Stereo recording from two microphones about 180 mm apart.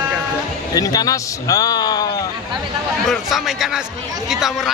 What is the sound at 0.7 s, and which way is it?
Speech, 20° left (ahead or behind).